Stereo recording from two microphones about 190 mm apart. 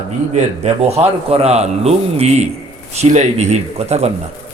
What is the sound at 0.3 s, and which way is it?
A man's voice, 35° right (ahead or behind).